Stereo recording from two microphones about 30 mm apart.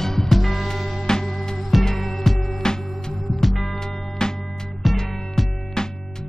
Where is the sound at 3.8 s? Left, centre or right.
Centre.